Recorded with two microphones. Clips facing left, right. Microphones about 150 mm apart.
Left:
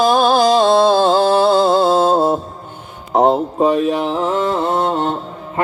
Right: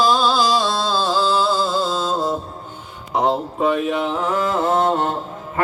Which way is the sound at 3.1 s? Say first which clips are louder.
Left 6 dB; 45° left (ahead or behind).